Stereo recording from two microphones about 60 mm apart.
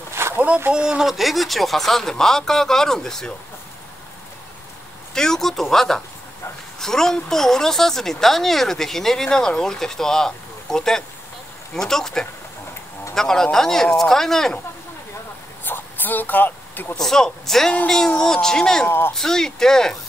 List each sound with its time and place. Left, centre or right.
0.2 s boat: right
0.7 s speech: centre
5.1 s a woman's voice: centre
15.6 s a sound: left
16.9 s a woman's voice: centre
18.9 s speech: left
19.1 s a woman's voice: centre